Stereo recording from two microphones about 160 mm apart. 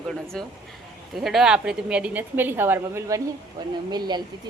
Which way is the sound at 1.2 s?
Centre (ahead or behind).